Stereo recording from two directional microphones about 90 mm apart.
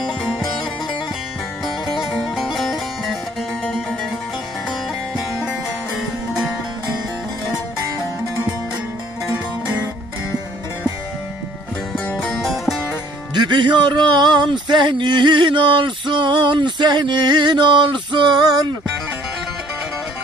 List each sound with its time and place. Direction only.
2.0 s music: centre (ahead or behind)
5.1 s music: 5° right (ahead or behind)
12.3 s music: centre (ahead or behind)
13.3 s music: 60° right (ahead or behind)
14.5 s a sound: 60° right (ahead or behind)